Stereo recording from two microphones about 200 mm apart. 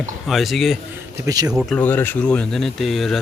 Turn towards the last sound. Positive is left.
turn(degrees=0)  # may be behind; listen again after turning